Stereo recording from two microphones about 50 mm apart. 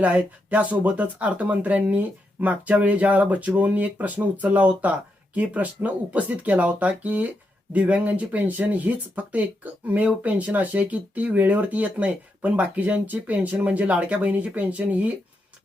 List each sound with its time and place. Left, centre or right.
0.0 s speech: right